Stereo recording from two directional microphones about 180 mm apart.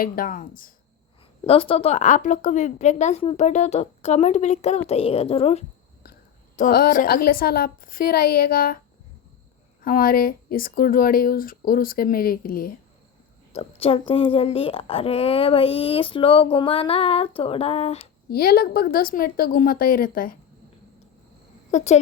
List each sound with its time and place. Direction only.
0.0 s speech: 50° left (ahead or behind)
1.5 s speech: 30° left (ahead or behind)
6.6 s speech: 55° left (ahead or behind)
9.8 s speech: 55° left (ahead or behind)
13.6 s speech: 30° left (ahead or behind)
18.3 s speech: 55° left (ahead or behind)
21.7 s speech: 40° left (ahead or behind)